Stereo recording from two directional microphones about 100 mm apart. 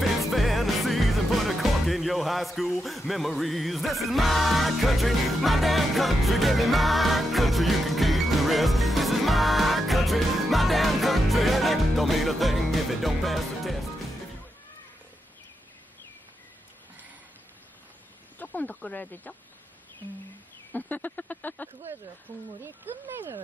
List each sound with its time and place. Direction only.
0.0 s music: centre (ahead or behind)
18.4 s a sound: 15° left (ahead or behind)
20.7 s speech: 20° left (ahead or behind)
22.6 s speech: 20° right (ahead or behind)